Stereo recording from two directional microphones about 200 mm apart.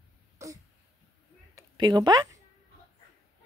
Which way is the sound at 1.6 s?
20° right (ahead or behind).